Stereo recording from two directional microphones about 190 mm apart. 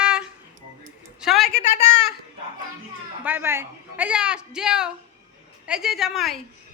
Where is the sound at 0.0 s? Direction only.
5° right (ahead or behind).